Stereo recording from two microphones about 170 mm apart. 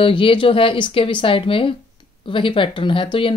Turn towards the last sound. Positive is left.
turn(degrees=30)  # may be behind; listen again after turning